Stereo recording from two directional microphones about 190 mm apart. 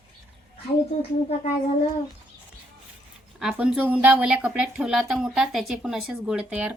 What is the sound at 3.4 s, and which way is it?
A woman's voice, 5° right (ahead or behind).